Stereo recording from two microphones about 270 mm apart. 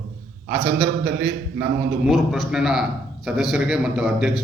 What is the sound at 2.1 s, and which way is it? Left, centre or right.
A man's voice, centre.